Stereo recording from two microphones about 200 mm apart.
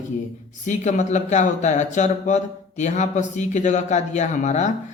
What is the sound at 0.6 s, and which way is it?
Speech, 35° left (ahead or behind).